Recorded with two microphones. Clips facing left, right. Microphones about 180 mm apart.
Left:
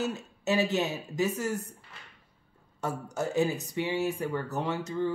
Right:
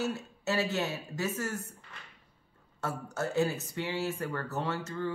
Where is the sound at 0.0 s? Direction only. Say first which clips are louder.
Left 1 dB; 20° left (ahead or behind).